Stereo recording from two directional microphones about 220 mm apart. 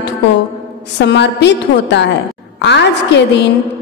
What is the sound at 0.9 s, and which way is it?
A woman's voice, 50° left (ahead or behind).